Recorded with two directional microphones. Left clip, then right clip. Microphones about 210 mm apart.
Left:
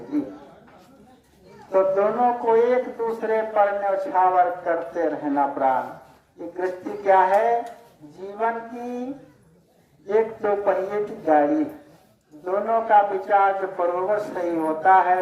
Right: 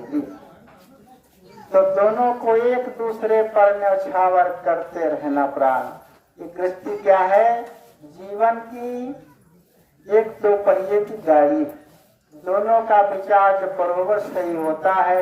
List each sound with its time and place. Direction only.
1.7 s speech: 40° right (ahead or behind)
10.1 s a man's voice: 30° right (ahead or behind)